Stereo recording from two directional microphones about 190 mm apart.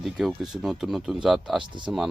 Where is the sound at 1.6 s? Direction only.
25° right (ahead or behind).